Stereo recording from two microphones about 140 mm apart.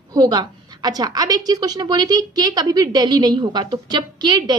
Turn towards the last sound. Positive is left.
turn(degrees=-30)  # may be behind; listen again after turning